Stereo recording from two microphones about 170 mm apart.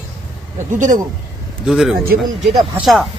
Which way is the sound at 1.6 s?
5° right (ahead or behind).